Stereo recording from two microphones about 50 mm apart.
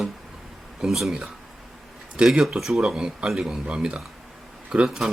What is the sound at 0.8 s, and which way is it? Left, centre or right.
Speech, centre.